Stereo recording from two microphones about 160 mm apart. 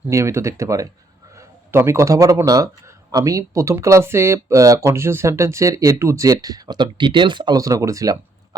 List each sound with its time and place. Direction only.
0.1 s a man's voice: 20° right (ahead or behind)